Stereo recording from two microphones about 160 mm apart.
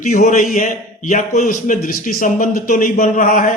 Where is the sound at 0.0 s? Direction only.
50° left (ahead or behind).